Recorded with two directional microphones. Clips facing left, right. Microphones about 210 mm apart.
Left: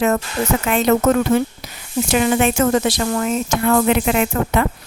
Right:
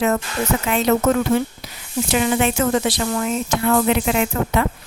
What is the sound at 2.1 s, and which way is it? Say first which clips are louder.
Speech: left 2 dB; 50° left (ahead or behind).